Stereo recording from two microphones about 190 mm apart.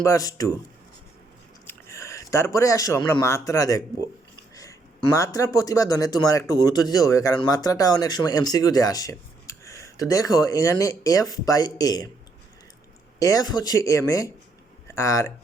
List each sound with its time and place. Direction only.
0.0 s speech: 20° left (ahead or behind)
1.6 s speech: 15° left (ahead or behind)
5.1 s speech: 15° left (ahead or behind)
13.1 s speech: 15° left (ahead or behind)